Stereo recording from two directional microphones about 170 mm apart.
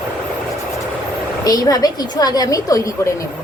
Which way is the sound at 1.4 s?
25° left (ahead or behind).